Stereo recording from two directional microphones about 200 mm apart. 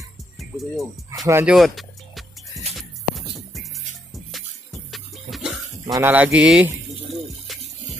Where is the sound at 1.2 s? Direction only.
10° right (ahead or behind).